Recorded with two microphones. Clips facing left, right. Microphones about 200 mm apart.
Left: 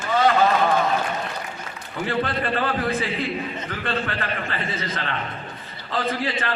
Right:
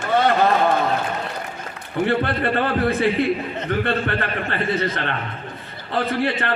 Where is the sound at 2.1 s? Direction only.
60° right (ahead or behind).